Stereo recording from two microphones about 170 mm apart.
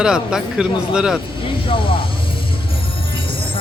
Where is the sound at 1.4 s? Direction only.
30° left (ahead or behind).